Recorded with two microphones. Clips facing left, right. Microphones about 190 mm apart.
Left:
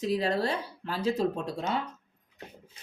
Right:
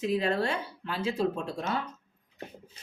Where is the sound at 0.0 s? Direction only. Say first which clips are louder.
Even; 35° left (ahead or behind).